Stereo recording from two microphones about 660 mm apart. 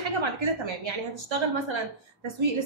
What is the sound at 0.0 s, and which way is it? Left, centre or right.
A woman's voice, right.